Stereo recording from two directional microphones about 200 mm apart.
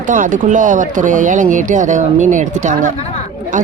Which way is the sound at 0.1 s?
40° right (ahead or behind).